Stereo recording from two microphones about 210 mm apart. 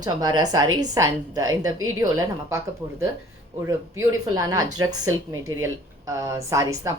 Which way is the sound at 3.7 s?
15° right (ahead or behind).